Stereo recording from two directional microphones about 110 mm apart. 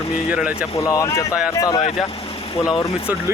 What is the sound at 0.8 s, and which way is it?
Speech, 30° left (ahead or behind).